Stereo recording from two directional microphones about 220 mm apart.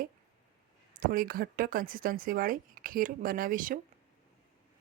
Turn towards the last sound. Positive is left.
turn(degrees=-40)  # may be behind; listen again after turning